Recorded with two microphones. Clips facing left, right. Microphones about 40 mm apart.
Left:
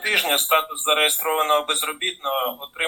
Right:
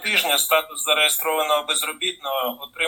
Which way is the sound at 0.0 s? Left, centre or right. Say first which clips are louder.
Even; centre.